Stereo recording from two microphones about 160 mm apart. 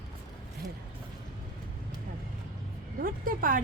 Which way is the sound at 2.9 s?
60° right (ahead or behind).